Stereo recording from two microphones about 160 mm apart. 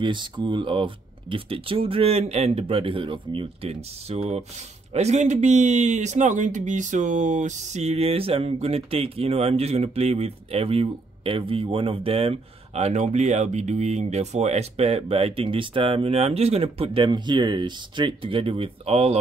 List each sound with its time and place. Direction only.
0.0 s speech: 30° right (ahead or behind)